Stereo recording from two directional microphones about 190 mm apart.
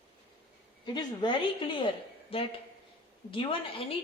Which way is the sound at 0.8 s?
25° left (ahead or behind).